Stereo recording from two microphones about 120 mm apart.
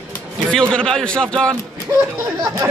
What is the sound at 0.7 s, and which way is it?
Speech, 5° left (ahead or behind).